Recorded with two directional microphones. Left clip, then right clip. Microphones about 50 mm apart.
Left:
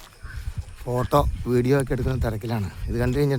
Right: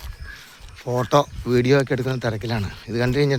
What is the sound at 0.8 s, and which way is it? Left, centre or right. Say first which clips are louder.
Speech: right 3 dB; left.